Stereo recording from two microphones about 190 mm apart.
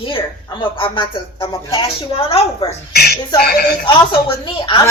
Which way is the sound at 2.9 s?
55° left (ahead or behind).